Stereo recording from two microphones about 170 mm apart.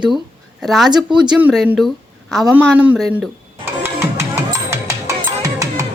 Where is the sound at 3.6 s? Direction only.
15° right (ahead or behind).